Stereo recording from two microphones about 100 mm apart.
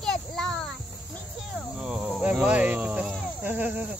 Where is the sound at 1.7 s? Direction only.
5° right (ahead or behind).